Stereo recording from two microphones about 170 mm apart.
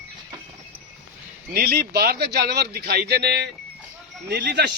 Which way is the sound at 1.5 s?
70° right (ahead or behind).